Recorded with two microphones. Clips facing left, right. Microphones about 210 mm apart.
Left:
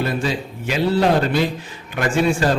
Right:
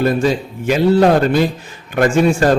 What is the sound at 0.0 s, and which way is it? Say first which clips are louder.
Speech: right 7 dB; 45° right (ahead or behind).